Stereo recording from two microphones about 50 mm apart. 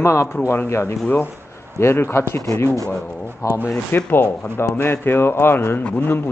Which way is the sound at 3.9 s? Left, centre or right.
Left.